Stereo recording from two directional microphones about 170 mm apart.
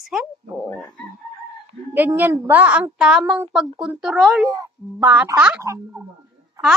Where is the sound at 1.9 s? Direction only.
10° right (ahead or behind).